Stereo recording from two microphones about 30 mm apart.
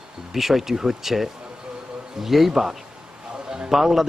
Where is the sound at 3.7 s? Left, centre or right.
Centre.